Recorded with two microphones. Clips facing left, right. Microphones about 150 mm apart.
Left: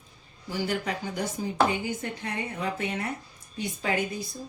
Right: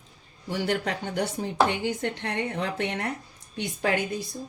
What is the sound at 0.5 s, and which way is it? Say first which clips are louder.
A woman's voice: right 2 dB; 65° right (ahead or behind).